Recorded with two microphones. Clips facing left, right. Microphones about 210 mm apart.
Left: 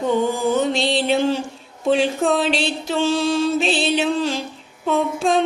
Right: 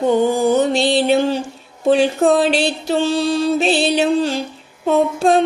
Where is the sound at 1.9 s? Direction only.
45° right (ahead or behind).